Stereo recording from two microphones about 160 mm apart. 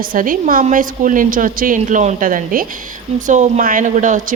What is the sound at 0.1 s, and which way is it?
A woman's voice, 60° right (ahead or behind).